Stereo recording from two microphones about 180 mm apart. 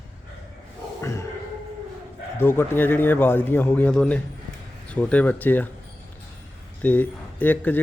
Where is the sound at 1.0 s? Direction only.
15° left (ahead or behind).